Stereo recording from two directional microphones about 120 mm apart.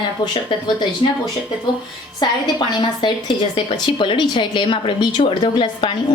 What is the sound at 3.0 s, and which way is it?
A woman's voice, 40° left (ahead or behind).